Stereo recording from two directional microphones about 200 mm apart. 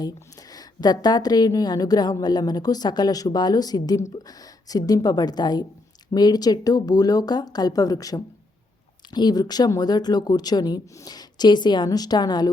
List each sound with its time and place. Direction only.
0.5 s a woman's voice: 20° left (ahead or behind)